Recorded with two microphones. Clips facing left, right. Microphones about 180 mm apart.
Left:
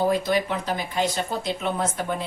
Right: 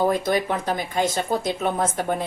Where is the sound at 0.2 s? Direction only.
50° right (ahead or behind).